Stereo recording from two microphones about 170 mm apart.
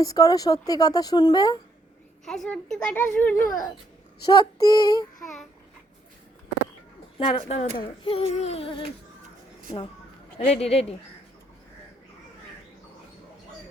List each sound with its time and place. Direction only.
0.0 s a woman's voice: 20° left (ahead or behind)
2.2 s a child's voice: 5° left (ahead or behind)
3.3 s speech: 50° left (ahead or behind)
4.3 s a woman's voice: 25° left (ahead or behind)
7.2 s speech: 35° left (ahead or behind)
10.3 s speech: 40° left (ahead or behind)